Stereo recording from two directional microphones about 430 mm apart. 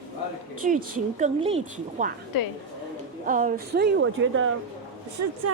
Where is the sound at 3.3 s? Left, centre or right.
Centre.